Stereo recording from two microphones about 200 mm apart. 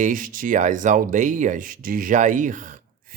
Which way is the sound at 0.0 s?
40° right (ahead or behind).